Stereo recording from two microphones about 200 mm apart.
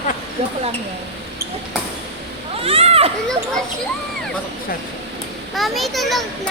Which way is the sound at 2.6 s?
30° right (ahead or behind).